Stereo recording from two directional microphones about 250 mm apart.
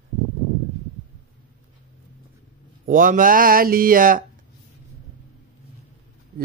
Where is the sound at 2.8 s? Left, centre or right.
Right.